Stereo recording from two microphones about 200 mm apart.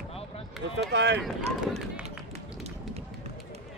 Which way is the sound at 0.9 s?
60° right (ahead or behind).